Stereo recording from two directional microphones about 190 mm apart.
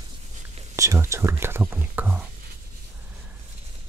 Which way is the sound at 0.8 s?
15° right (ahead or behind).